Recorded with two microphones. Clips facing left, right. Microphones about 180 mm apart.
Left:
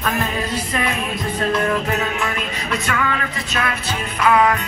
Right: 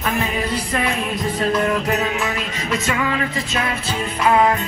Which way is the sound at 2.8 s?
25° right (ahead or behind).